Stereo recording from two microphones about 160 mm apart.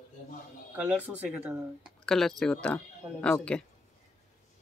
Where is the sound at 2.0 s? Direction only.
Centre (ahead or behind).